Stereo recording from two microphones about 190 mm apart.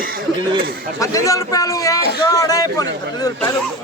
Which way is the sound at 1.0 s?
15° left (ahead or behind).